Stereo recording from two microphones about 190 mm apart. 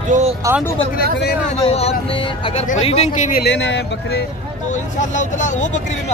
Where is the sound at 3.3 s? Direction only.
65° left (ahead or behind).